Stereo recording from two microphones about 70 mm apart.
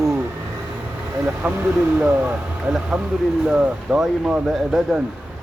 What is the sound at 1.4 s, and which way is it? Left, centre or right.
Speech, right.